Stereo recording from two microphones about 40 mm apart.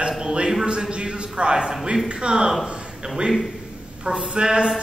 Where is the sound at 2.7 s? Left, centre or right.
Centre.